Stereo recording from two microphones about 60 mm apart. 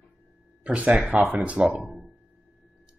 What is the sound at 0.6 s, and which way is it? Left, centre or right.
Speech, right.